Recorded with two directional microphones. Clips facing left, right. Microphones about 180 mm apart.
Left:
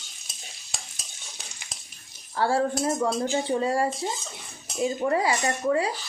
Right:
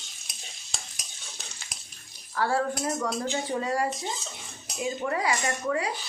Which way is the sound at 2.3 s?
30° left (ahead or behind).